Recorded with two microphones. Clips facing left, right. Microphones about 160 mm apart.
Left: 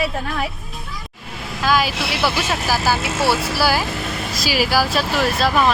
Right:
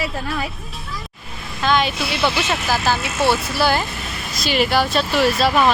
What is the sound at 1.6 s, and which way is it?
Speech, 5° left (ahead or behind).